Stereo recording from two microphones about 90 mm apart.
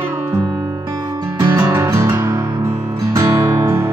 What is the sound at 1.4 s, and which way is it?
Music, 35° right (ahead or behind).